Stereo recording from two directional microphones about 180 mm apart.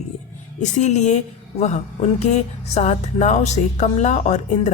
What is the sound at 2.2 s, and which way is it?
Speech, 40° left (ahead or behind).